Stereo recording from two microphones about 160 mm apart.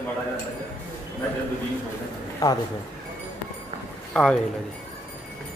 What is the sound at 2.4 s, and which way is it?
Speech, 20° left (ahead or behind).